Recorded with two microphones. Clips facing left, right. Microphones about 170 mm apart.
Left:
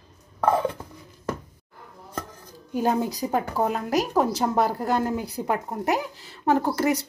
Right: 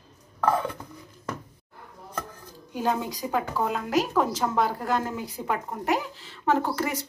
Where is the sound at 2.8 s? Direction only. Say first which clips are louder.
Left 3 dB; 40° left (ahead or behind).